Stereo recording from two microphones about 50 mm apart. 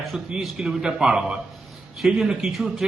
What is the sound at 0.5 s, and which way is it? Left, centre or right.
A man's voice, centre.